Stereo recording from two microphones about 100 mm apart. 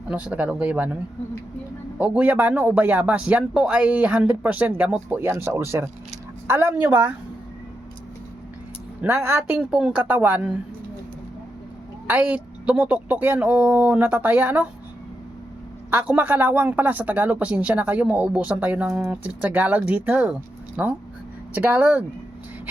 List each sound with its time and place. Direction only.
0.1 s a man's voice: 15° right (ahead or behind)
2.0 s a man's voice: 15° right (ahead or behind)
9.0 s a man's voice: 20° right (ahead or behind)
12.0 s a man's voice: 20° right (ahead or behind)
15.9 s a man's voice: 15° right (ahead or behind)